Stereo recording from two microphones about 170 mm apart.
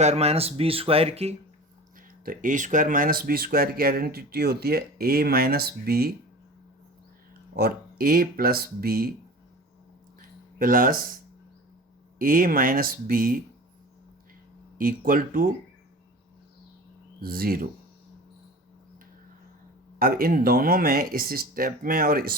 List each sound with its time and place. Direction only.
0.0 s speech: 40° right (ahead or behind)
2.2 s speech: 50° right (ahead or behind)
7.5 s speech: 65° right (ahead or behind)
10.2 s a sound: 55° right (ahead or behind)
12.2 s speech: 55° right (ahead or behind)
14.8 s speech: 55° right (ahead or behind)
17.2 s speech: 60° right (ahead or behind)
20.0 s speech: 60° right (ahead or behind)